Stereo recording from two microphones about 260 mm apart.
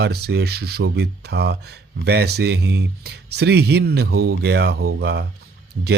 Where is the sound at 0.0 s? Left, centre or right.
Right.